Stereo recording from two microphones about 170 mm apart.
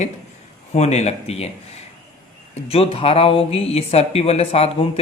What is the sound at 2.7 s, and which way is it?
Speech, 35° left (ahead or behind).